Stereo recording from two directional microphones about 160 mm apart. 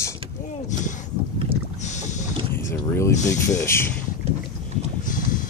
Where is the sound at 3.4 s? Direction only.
15° left (ahead or behind).